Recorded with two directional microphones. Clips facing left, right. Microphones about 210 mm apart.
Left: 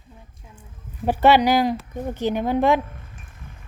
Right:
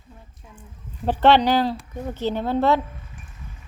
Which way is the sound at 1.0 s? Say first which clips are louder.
Left 1 dB; 10° left (ahead or behind).